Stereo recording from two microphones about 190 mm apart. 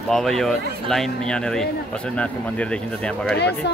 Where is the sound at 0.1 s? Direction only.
Centre (ahead or behind).